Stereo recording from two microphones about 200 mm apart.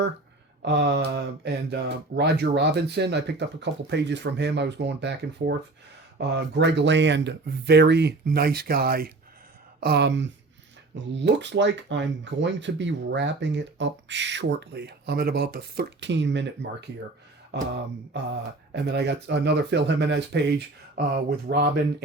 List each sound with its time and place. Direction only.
0.6 s speech: 55° right (ahead or behind)
18.7 s speech: 60° right (ahead or behind)